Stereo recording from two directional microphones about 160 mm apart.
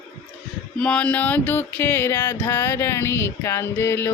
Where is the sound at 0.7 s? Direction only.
5° left (ahead or behind).